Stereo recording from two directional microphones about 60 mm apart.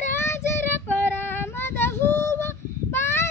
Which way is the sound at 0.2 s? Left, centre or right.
Left.